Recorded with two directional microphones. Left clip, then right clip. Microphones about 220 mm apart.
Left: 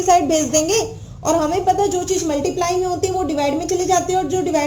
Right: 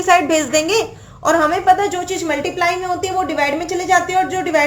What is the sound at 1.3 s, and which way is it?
A woman's voice, 15° right (ahead or behind).